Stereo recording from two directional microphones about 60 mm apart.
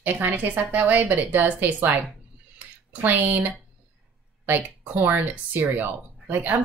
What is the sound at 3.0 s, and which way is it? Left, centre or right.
Speech, right.